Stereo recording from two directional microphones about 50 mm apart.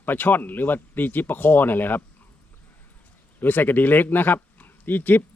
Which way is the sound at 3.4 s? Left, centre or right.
Left.